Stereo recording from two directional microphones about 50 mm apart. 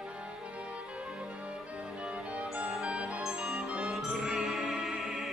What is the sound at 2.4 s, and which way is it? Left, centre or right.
Music, right.